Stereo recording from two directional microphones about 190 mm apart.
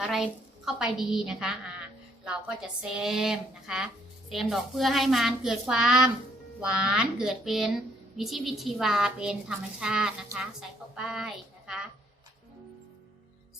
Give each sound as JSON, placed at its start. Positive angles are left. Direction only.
{"t": 0.0, "sound": "a woman's voice", "side_deg": 0}